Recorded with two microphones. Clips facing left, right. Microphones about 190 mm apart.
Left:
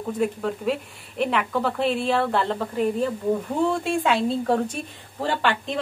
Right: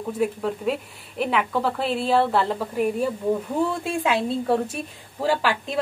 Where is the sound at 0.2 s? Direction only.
Centre (ahead or behind).